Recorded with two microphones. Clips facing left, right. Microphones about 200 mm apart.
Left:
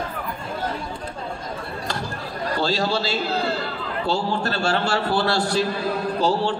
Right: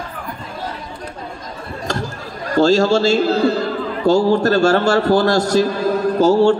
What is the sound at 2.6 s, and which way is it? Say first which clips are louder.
A man's voice: right 11 dB; 45° right (ahead or behind).